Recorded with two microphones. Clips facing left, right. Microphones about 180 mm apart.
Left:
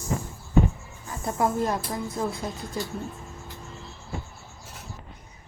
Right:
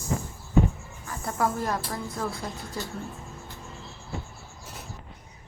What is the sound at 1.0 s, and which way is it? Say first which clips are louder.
Speech: left 2 dB; 20° left (ahead or behind).